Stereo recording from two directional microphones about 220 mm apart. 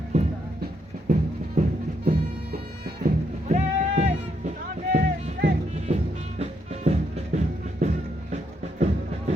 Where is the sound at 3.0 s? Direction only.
35° right (ahead or behind).